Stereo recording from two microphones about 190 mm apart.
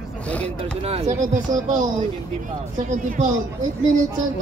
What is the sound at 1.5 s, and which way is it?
Speech, 20° right (ahead or behind).